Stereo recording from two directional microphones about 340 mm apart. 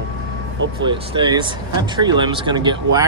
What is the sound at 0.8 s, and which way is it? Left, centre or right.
Speech, centre.